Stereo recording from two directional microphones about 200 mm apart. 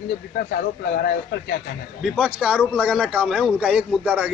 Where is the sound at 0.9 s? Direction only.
50° left (ahead or behind).